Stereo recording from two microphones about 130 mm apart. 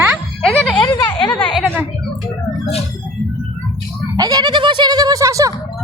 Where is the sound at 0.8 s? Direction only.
35° left (ahead or behind).